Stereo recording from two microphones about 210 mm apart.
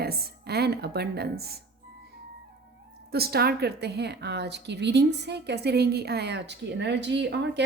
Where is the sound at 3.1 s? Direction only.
50° right (ahead or behind).